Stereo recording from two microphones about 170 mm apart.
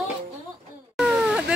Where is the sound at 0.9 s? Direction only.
5° right (ahead or behind).